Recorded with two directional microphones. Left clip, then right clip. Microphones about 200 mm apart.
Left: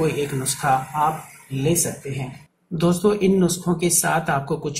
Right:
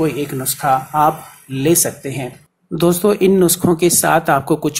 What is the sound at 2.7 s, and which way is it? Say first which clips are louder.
Speech: right 5 dB; 30° right (ahead or behind).